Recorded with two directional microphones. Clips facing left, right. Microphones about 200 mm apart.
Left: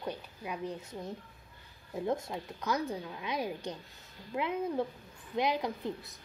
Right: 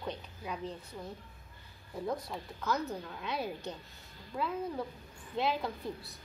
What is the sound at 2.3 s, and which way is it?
A woman's voice, 15° left (ahead or behind).